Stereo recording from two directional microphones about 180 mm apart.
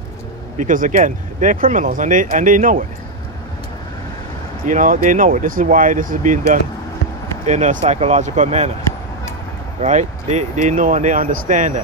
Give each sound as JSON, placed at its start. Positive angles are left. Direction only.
{"t": 0.6, "sound": "speech", "side_deg": -45}
{"t": 4.6, "sound": "speech", "side_deg": -45}
{"t": 9.8, "sound": "speech", "side_deg": -40}